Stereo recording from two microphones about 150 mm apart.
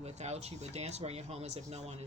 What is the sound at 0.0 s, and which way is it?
Speech, 45° right (ahead or behind).